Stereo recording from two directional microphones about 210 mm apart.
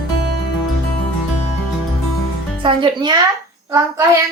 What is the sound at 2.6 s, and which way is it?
Speech, 20° right (ahead or behind).